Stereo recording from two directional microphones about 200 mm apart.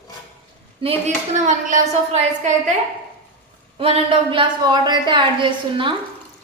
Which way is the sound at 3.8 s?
30° right (ahead or behind).